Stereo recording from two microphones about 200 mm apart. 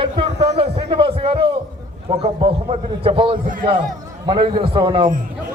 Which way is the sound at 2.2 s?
30° right (ahead or behind).